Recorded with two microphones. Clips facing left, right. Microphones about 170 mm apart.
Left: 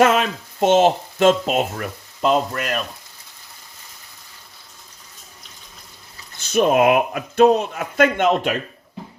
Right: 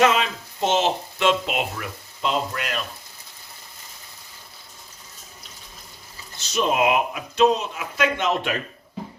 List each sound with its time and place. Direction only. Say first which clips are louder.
0.0 s speech: left 3 dB; 50° left (ahead or behind)
6.4 s speech: left 6 dB; 55° left (ahead or behind)